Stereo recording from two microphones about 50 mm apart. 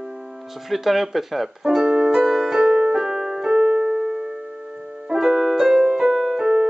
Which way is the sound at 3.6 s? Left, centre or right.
Right.